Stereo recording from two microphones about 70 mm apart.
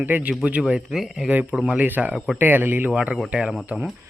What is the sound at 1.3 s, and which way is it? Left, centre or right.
Speech, right.